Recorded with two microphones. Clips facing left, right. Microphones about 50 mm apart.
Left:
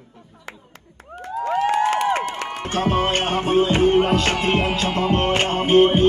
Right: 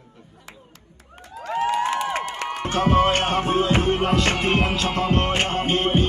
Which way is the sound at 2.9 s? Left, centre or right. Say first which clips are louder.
Right 2 dB; left.